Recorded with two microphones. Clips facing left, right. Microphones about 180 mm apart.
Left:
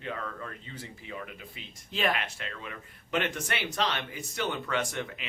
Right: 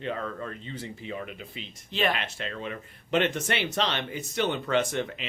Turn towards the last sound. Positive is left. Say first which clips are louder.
# right 5 dB
turn(degrees=-25)  # may be behind; listen again after turning